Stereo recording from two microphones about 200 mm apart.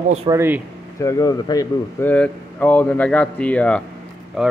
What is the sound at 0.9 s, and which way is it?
Speech, 15° left (ahead or behind).